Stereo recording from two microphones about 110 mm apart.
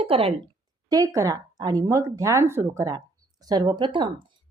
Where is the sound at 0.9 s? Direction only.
30° right (ahead or behind).